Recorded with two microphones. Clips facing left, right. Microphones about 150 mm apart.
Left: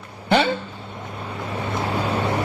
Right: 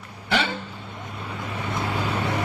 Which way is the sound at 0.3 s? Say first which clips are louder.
Left 6 dB; 30° left (ahead or behind).